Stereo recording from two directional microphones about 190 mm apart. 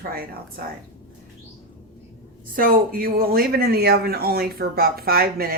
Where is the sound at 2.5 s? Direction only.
45° right (ahead or behind).